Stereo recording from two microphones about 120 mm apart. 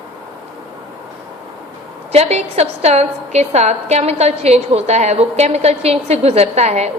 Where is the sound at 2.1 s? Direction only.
60° right (ahead or behind).